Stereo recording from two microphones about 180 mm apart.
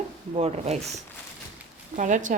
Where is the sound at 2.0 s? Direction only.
45° right (ahead or behind).